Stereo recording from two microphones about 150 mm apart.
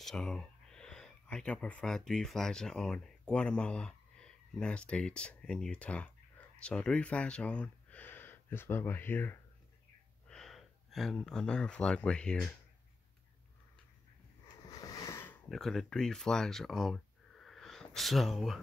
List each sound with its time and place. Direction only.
0.0 s speech: 5° left (ahead or behind)
10.2 s speech: 5° left (ahead or behind)
14.7 s a sound: 25° left (ahead or behind)
15.5 s speech: centre (ahead or behind)